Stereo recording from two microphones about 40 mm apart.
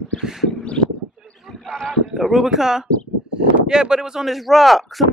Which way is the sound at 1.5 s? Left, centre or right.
Left.